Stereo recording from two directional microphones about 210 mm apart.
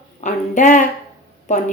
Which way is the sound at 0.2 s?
35° left (ahead or behind).